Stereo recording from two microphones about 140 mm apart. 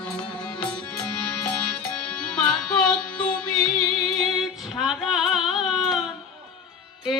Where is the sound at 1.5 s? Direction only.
10° left (ahead or behind).